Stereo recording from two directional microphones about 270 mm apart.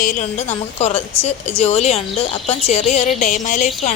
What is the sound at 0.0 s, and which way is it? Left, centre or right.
Speech, left.